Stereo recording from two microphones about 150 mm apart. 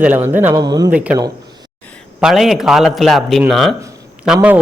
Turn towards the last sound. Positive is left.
turn(degrees=-10)  # may be behind; listen again after turning